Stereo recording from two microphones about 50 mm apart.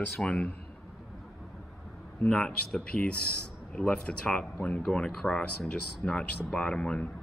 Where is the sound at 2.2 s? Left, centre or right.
Centre.